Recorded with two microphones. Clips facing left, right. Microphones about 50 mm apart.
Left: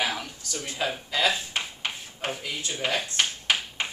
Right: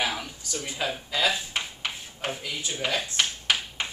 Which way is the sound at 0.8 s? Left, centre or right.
Centre.